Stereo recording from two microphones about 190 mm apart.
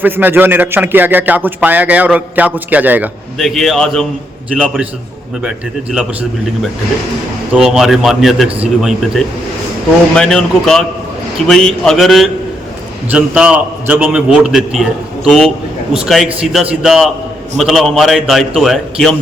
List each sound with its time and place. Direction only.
0.0 s a man's voice: 10° right (ahead or behind)
8.4 s a man's voice: 30° right (ahead or behind)
8.8 s a man's voice: centre (ahead or behind)